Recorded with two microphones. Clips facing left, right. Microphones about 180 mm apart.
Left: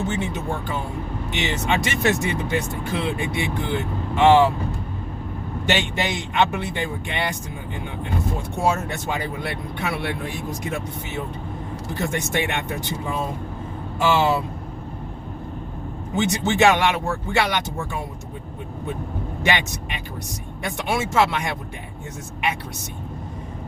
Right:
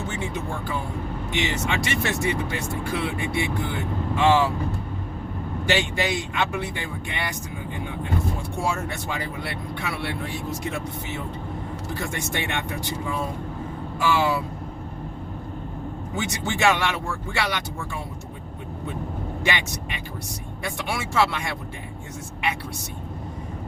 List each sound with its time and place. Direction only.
0.1 s speech: 20° left (ahead or behind)
5.6 s speech: 20° left (ahead or behind)
8.6 s speech: 20° left (ahead or behind)
16.1 s speech: 20° left (ahead or behind)
19.4 s speech: 20° left (ahead or behind)